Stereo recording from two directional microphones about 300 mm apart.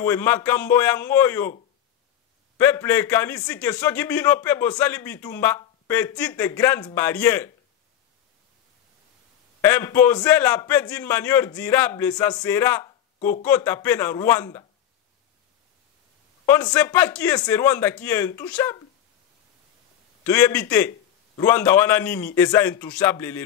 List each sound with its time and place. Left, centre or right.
0.0 s a man's voice: centre
2.5 s a man's voice: centre
9.6 s a man's voice: centre
16.4 s a man's voice: centre
20.2 s a man's voice: centre